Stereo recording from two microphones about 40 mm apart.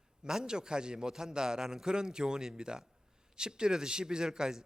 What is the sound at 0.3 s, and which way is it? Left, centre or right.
A man's voice, centre.